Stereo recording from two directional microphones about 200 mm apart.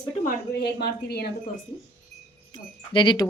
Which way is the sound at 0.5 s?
55° left (ahead or behind).